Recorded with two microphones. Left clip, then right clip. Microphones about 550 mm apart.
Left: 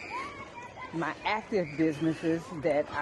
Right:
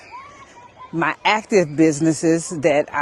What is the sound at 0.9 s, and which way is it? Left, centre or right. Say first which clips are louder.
A man's voice: right 13 dB; right.